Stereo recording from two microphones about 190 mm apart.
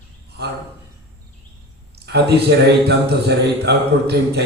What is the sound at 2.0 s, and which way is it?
A man's voice, 60° right (ahead or behind).